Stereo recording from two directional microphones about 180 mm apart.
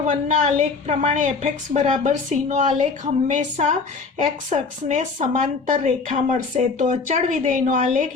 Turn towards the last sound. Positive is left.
turn(degrees=-45)  # may be behind; listen again after turning